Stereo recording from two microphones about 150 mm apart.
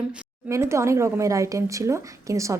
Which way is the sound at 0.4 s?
20° right (ahead or behind).